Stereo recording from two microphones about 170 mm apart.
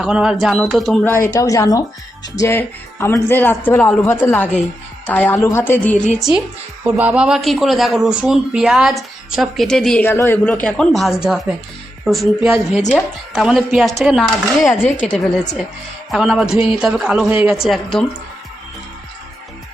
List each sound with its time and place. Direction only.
0.0 s speech: 5° right (ahead or behind)
1.0 s speech: 15° left (ahead or behind)
6.9 s speech: 5° right (ahead or behind)